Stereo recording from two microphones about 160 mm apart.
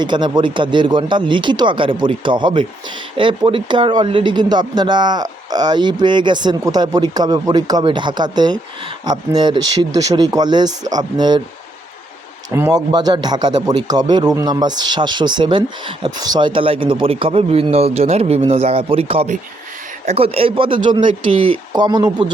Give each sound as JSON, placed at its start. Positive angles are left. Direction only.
{"t": 0.0, "sound": "speech", "side_deg": -30}
{"t": 12.5, "sound": "a man's voice", "side_deg": -15}